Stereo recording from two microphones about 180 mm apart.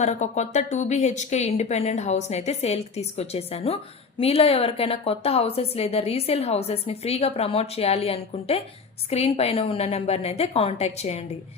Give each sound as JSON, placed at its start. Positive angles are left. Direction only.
{"t": 0.0, "sound": "a woman's voice", "side_deg": 40}